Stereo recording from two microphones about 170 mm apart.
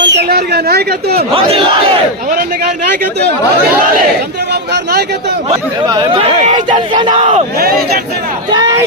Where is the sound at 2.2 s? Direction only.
55° right (ahead or behind).